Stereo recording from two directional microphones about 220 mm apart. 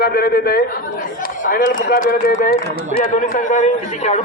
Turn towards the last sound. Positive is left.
turn(degrees=30)  # may be behind; listen again after turning